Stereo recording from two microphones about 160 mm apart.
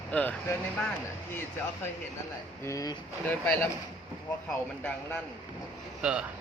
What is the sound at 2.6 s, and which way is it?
Speech, 20° left (ahead or behind).